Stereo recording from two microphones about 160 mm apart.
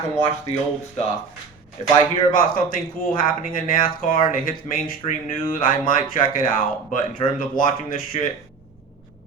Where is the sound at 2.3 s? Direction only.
60° left (ahead or behind).